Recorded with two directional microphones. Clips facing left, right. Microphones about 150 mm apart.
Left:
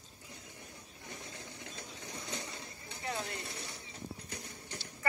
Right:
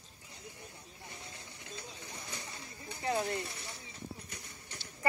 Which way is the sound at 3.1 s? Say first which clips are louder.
Right 7 dB; 55° right (ahead or behind).